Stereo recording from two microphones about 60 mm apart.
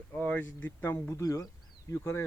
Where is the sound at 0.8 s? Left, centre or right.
Left.